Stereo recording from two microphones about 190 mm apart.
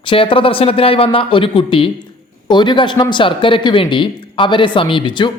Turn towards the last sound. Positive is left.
turn(degrees=25)  # may be behind; listen again after turning